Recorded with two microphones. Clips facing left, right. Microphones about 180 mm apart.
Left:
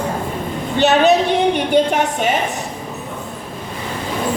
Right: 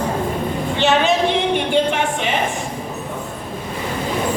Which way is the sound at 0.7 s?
40° left (ahead or behind).